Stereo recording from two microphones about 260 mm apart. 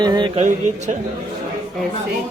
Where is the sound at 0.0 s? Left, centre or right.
Centre.